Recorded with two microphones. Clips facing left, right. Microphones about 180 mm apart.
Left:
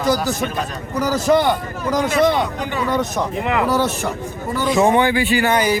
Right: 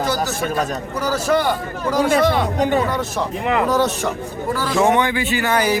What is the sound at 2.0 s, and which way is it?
Speech, 50° right (ahead or behind).